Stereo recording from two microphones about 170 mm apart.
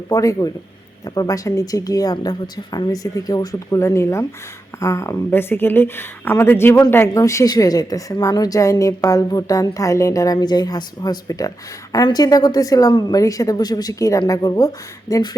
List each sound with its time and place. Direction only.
0.1 s speech: 20° left (ahead or behind)